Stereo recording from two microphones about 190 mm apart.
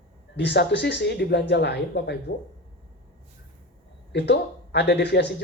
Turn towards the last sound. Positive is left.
turn(degrees=65)  # may be behind; listen again after turning